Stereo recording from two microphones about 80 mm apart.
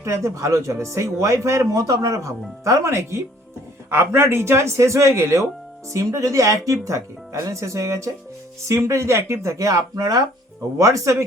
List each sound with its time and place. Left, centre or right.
0.0 s a man's voice: right
10.8 s speech: right